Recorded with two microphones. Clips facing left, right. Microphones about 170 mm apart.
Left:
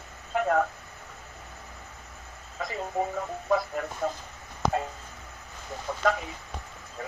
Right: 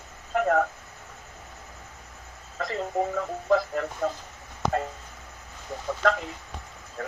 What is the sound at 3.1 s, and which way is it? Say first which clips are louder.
Speech: right 5 dB; 85° right.